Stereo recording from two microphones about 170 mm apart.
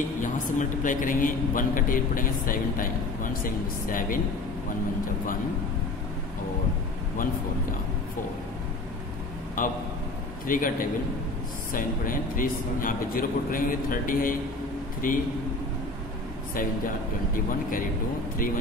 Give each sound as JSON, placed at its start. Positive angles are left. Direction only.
{"t": 0.2, "sound": "a man's voice", "side_deg": 50}
{"t": 9.6, "sound": "a man's voice", "side_deg": 55}
{"t": 11.7, "sound": "a man's voice", "side_deg": 55}